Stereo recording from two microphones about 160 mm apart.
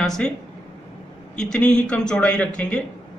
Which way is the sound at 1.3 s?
5° left (ahead or behind).